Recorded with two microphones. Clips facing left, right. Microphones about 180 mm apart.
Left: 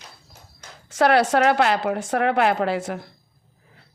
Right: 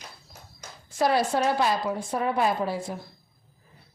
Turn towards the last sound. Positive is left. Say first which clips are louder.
# left 5 dB
turn(degrees=75)  # may be behind; listen again after turning